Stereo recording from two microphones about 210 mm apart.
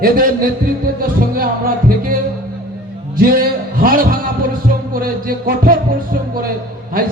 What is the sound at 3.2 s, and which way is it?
Speech, 45° right (ahead or behind).